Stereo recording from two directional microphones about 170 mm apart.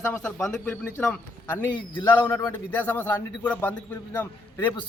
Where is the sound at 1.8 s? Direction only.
30° left (ahead or behind); by 4.2 s 10° left (ahead or behind).